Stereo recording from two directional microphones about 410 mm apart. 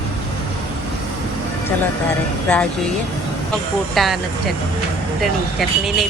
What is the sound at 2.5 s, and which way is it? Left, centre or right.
Speech, centre.